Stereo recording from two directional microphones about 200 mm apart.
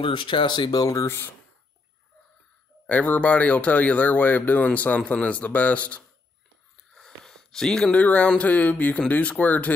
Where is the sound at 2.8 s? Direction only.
5° left (ahead or behind).